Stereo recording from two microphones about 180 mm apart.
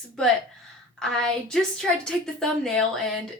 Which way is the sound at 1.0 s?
5° left (ahead or behind).